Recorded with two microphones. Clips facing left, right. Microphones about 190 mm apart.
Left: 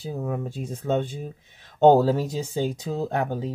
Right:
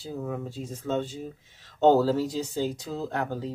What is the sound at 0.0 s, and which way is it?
Speech, 60° left (ahead or behind).